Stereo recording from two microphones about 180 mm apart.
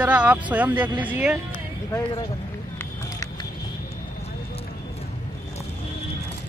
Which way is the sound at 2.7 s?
20° left (ahead or behind).